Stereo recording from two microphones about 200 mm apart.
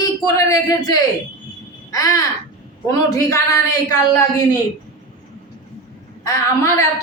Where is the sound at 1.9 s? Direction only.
15° left (ahead or behind).